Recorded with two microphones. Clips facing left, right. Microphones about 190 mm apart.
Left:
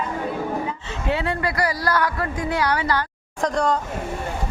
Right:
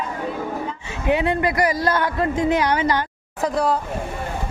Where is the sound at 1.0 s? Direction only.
20° right (ahead or behind).